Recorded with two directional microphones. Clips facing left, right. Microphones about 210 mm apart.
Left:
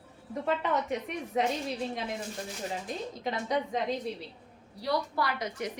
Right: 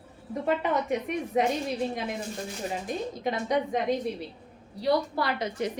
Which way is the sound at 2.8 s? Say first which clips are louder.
Right 4 dB; 15° right (ahead or behind).